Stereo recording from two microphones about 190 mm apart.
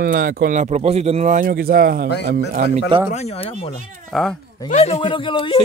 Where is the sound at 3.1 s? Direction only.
35° left (ahead or behind).